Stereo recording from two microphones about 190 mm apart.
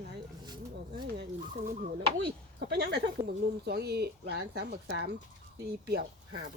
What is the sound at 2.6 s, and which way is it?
Speech, 60° right (ahead or behind).